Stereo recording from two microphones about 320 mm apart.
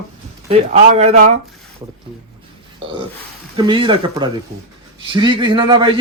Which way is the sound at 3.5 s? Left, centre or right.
Centre.